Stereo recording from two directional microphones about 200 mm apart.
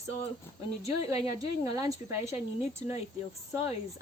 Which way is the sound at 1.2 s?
20° right (ahead or behind).